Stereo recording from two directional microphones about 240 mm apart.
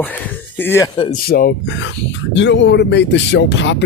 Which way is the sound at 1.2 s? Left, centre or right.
Left.